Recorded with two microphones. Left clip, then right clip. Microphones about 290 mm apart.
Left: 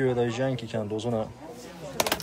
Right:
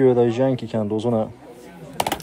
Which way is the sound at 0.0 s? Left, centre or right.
Right.